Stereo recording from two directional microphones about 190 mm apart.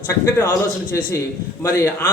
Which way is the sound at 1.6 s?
15° left (ahead or behind).